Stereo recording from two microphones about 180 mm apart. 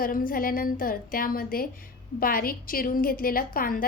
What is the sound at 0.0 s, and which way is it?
A woman's voice, 50° left (ahead or behind).